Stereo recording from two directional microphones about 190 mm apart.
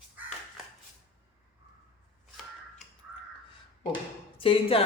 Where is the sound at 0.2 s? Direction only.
10° right (ahead or behind).